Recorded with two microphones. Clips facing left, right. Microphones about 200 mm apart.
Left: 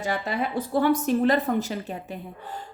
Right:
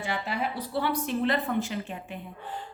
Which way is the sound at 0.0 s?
45° left (ahead or behind).